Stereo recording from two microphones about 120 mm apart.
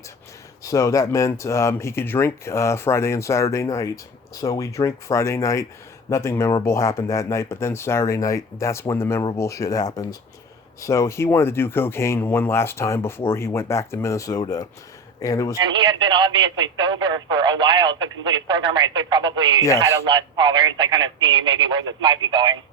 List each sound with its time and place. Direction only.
0.6 s speech: 25° left (ahead or behind)
15.6 s speech: 40° right (ahead or behind)